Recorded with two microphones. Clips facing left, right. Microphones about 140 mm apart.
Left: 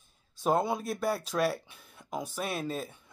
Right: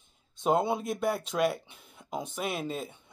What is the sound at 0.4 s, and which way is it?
Speech, 20° right (ahead or behind).